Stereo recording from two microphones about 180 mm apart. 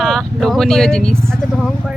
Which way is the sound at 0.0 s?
Centre (ahead or behind).